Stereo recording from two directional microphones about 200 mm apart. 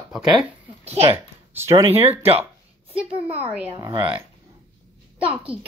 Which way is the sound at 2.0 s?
30° right (ahead or behind).